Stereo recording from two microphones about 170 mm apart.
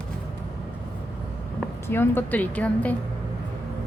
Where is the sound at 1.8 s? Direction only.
15° left (ahead or behind).